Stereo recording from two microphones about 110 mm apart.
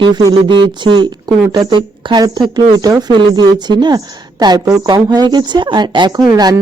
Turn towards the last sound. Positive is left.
turn(degrees=-35)  # may be behind; listen again after turning